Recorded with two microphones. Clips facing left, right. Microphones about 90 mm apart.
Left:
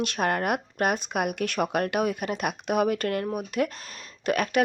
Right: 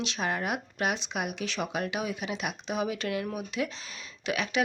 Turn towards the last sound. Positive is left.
turn(degrees=50)  # may be behind; listen again after turning